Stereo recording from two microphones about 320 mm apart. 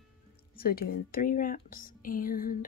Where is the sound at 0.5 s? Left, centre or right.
Left.